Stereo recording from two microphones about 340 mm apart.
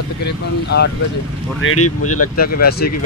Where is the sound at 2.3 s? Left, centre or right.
Left.